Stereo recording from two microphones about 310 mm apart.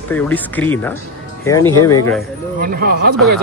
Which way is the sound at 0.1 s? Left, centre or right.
Centre.